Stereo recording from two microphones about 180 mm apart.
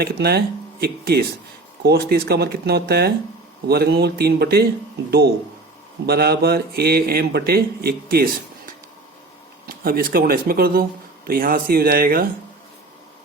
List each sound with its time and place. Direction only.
0.0 s speech: 60° right (ahead or behind)
6.1 s speech: 60° right (ahead or behind)